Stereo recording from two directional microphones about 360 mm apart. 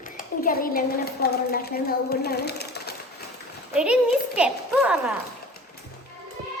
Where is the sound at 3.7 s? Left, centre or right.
Centre.